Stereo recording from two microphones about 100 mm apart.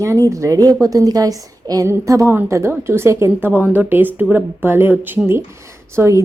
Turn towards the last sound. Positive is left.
turn(degrees=-30)  # may be behind; listen again after turning